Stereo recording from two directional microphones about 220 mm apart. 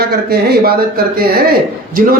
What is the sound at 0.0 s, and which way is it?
A man's voice, 45° right (ahead or behind).